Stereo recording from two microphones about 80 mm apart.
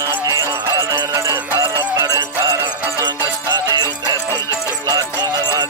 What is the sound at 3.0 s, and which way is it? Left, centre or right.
Music, right.